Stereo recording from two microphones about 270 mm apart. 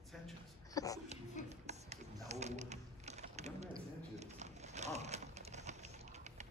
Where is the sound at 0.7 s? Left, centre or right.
Centre.